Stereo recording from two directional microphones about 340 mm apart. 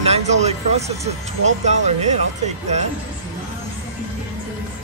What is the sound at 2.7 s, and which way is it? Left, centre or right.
Speech, centre.